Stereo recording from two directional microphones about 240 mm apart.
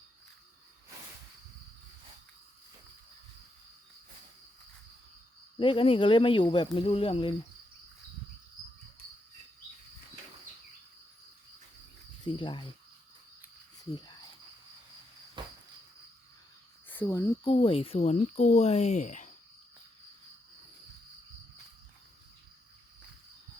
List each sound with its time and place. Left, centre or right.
5.5 s speech: left
12.2 s speech: centre
13.9 s speech: centre
15.4 s cricket: centre
16.9 s speech: centre; by 19.3 s left